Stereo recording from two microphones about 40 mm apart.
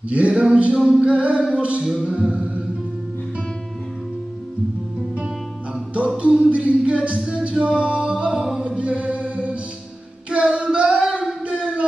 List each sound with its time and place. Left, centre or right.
0.1 s a sound: right
0.7 s a capella: centre
1.0 s a sound: right
2.1 s music: right
6.1 s music: right
7.6 s singing: right
8.6 s chant: right
10.3 s a sound: right
11.4 s music: right